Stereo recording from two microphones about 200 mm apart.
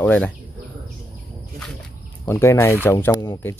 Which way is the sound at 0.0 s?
10° left (ahead or behind).